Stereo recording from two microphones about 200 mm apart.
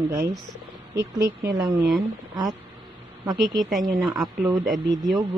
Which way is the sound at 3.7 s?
Centre (ahead or behind).